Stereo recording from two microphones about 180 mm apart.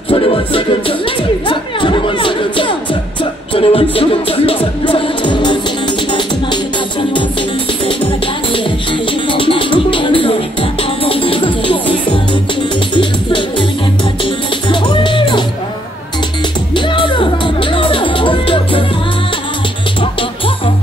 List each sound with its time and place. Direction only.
0.1 s music: 30° left (ahead or behind)
7.8 s music: 30° left (ahead or behind)
16.7 s music: 25° left (ahead or behind)
20.0 s music: 30° left (ahead or behind)